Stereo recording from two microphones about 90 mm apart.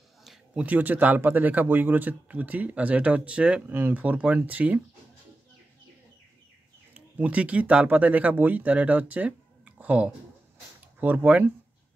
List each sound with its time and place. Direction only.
0.2 s a sound: centre (ahead or behind)
0.7 s speech: 20° right (ahead or behind)
6.9 s speech: 15° right (ahead or behind)